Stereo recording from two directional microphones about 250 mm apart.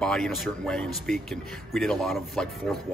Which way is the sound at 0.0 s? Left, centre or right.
Centre.